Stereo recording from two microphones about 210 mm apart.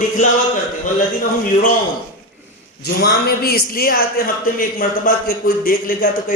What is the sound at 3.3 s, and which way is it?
Speech, 45° left (ahead or behind).